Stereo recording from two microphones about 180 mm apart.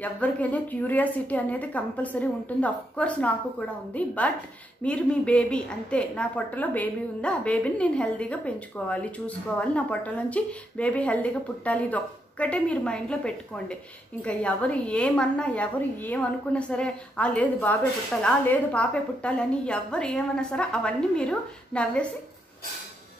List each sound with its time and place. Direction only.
0.0 s a woman's voice: 10° left (ahead or behind)